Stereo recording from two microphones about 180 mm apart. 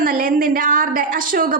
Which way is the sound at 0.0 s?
50° right (ahead or behind).